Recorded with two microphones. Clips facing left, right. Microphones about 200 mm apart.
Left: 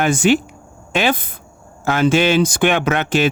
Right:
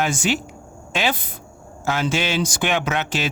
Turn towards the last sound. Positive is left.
turn(degrees=55)  # may be behind; listen again after turning